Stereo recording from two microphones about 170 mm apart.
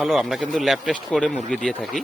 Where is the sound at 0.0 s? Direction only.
Centre (ahead or behind).